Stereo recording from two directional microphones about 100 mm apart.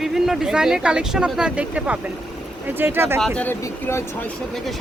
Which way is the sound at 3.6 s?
25° left (ahead or behind).